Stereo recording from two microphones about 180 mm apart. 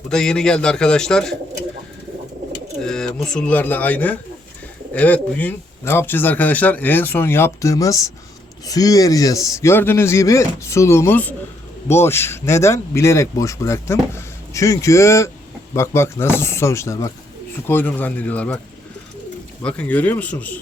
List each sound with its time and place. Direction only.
0.1 s speech: 5° left (ahead or behind)
2.8 s speech: 5° left (ahead or behind)
19.6 s speech: 5° left (ahead or behind)